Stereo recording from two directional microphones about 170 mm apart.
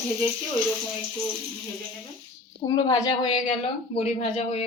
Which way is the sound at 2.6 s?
20° left (ahead or behind).